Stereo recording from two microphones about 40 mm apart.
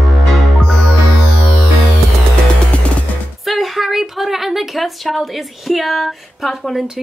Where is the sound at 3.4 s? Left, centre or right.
Centre.